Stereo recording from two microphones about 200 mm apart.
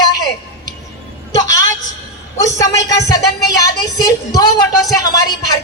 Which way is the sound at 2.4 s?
15° left (ahead or behind).